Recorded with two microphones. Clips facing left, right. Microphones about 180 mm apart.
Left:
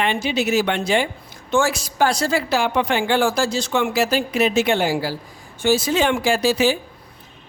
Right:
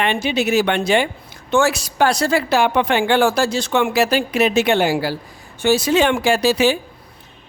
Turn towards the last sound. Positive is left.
turn(degrees=-70)  # may be behind; listen again after turning